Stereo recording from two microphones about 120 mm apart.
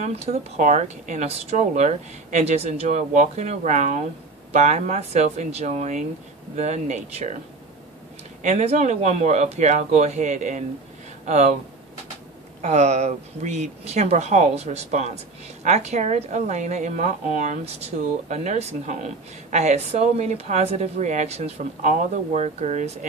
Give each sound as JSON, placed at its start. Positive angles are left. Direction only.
{"t": 0.0, "sound": "a woman's voice", "side_deg": -65}
{"t": 8.4, "sound": "a woman's voice", "side_deg": -75}
{"t": 12.6, "sound": "a woman's voice", "side_deg": -75}